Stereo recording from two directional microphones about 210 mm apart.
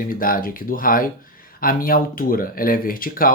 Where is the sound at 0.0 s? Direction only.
40° left (ahead or behind).